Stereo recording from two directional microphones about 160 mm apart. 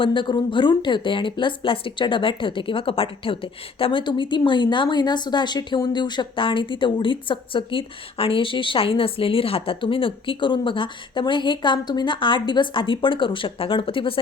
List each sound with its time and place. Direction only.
0.0 s speech: 30° left (ahead or behind)